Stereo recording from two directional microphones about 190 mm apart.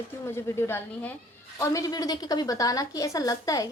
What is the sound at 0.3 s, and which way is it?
A woman's voice, 15° left (ahead or behind).